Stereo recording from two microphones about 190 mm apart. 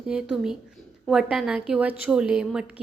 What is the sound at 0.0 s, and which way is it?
A woman's voice, 5° right (ahead or behind).